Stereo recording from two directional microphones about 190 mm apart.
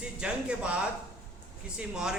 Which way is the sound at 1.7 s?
5° right (ahead or behind).